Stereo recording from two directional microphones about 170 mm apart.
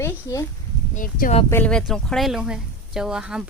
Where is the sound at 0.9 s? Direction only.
50° left (ahead or behind).